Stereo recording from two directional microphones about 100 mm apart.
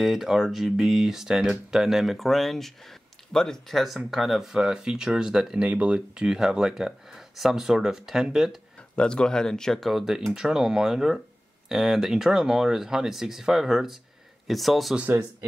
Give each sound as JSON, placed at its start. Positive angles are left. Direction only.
{"t": 0.0, "sound": "speech", "side_deg": -5}
{"t": 8.7, "sound": "speech", "side_deg": 10}
{"t": 15.0, "sound": "speech", "side_deg": -20}